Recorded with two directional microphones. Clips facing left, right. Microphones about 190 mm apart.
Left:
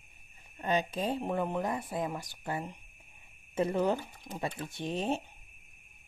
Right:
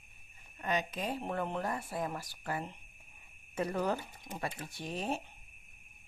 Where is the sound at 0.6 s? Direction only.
30° left (ahead or behind).